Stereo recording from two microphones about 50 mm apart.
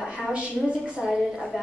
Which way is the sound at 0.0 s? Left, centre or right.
Centre.